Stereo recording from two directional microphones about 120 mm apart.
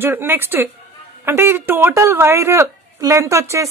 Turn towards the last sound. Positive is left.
turn(degrees=-25)  # may be behind; listen again after turning